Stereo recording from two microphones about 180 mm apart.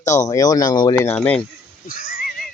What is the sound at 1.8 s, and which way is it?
Neigh, 50° left (ahead or behind).